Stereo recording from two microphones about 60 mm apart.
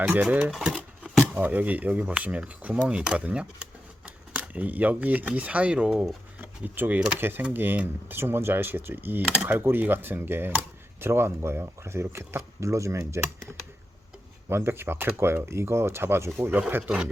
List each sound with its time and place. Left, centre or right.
0.5 s speech: centre
1.0 s speech: right
6.7 s speech: right
14.5 s speech: right
16.6 s speech: right